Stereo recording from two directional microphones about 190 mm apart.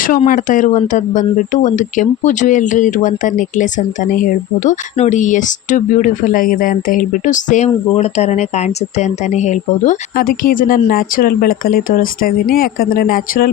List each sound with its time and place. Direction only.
0.3 s speech: 45° left (ahead or behind)